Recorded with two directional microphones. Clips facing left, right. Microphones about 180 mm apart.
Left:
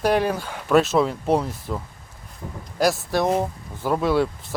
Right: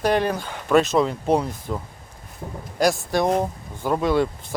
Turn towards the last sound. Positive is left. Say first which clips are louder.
# even
turn(degrees=5)  # may be behind; listen again after turning